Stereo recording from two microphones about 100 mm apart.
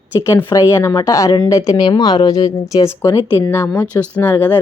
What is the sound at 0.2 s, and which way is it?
A woman's voice, 30° left (ahead or behind).